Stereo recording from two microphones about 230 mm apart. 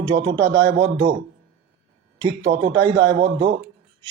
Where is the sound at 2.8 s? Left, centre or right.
Right.